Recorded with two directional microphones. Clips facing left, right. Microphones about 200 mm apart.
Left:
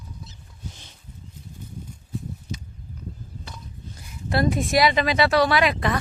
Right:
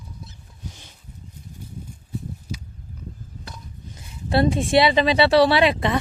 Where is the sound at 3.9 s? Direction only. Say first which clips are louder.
Right 4 dB; 30° right (ahead or behind).